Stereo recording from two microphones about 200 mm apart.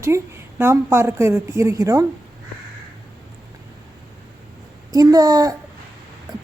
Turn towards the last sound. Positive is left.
turn(degrees=-20)  # may be behind; listen again after turning